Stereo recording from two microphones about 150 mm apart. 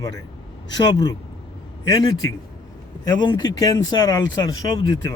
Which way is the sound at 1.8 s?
25° left (ahead or behind).